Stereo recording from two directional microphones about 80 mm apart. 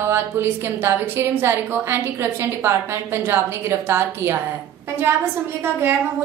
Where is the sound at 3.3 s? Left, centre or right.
Right.